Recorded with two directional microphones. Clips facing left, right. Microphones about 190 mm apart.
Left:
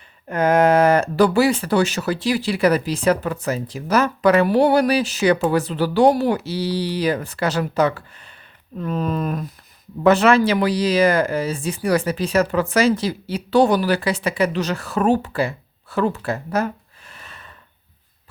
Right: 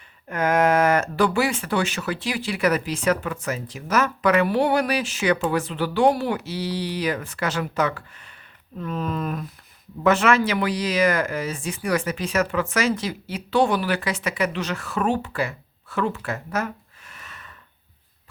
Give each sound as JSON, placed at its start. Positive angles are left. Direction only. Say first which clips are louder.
{"t": 0.3, "sound": "speech", "louder": "left 4 dB", "side_deg": 30}